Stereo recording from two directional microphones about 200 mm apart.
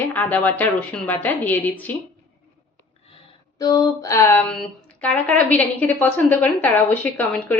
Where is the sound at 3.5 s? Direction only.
15° left (ahead or behind).